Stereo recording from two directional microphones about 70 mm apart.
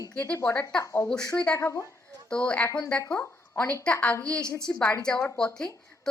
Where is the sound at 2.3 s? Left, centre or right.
Centre.